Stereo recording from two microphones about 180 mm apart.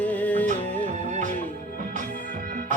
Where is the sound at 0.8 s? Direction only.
40° right (ahead or behind).